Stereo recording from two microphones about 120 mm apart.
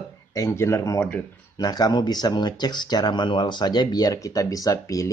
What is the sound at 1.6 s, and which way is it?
Speech, 35° left (ahead or behind).